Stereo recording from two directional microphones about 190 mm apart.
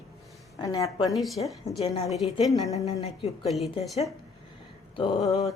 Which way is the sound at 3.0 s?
30° left (ahead or behind).